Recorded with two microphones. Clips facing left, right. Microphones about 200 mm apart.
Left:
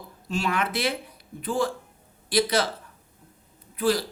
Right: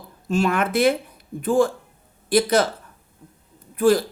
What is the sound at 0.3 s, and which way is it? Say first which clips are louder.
Speech: right 6 dB; 50° right (ahead or behind).